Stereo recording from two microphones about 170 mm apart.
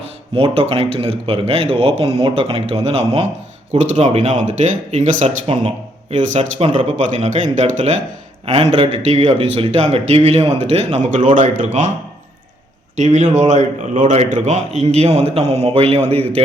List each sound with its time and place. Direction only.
0.0 s speech: 35° right (ahead or behind)
13.0 s speech: 45° right (ahead or behind)